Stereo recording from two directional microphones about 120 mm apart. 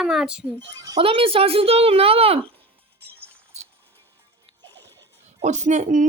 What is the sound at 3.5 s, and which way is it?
Music, 65° right (ahead or behind).